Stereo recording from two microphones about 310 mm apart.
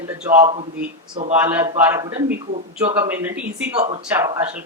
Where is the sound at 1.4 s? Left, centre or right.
Centre.